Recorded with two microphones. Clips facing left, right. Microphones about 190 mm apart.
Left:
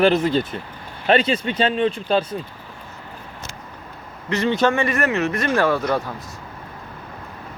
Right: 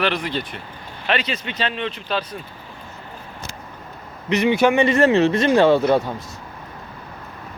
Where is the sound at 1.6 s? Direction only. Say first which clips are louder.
Left 6 dB; 45° left (ahead or behind).